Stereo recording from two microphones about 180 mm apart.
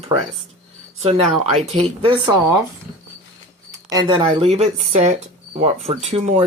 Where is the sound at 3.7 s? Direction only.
25° right (ahead or behind).